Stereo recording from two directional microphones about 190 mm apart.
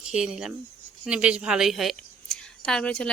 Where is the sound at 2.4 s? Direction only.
5° left (ahead or behind).